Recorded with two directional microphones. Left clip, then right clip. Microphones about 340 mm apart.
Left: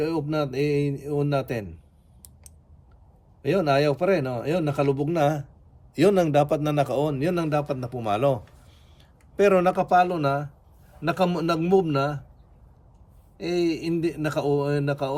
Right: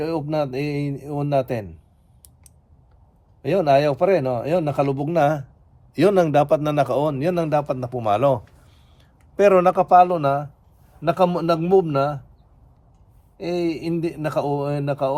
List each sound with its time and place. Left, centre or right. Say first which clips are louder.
0.0 s a man's voice: right 3 dB; centre
3.4 s a man's voice: right 4 dB; centre
13.3 s a man's voice: right 1 dB; centre